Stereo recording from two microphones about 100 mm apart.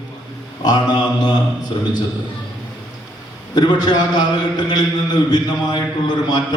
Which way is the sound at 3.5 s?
45° left (ahead or behind).